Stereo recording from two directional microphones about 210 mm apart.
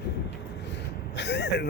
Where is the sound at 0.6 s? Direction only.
55° left (ahead or behind).